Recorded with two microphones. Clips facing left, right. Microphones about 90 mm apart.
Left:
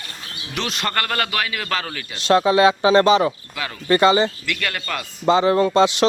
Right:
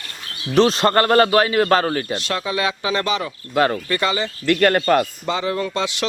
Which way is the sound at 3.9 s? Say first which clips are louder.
Left 6 dB; 25° left (ahead or behind).